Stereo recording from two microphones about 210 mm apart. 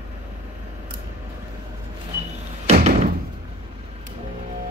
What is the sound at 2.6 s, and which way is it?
Door, 30° right (ahead or behind).